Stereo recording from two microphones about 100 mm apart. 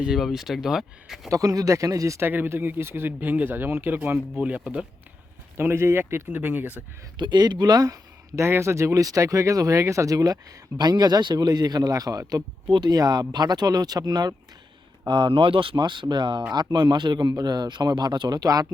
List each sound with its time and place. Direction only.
0.0 s speech: 5° right (ahead or behind)
1.3 s speech: 35° right (ahead or behind); by 4.9 s 10° right (ahead or behind)
5.5 s speech: 25° right (ahead or behind)
7.2 s speech: 45° right (ahead or behind)
8.4 s speech: 25° right (ahead or behind)
12.6 s speech: 50° right (ahead or behind)